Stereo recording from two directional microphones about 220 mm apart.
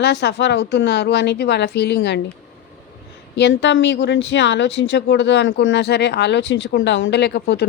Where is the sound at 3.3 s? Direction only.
50° left (ahead or behind).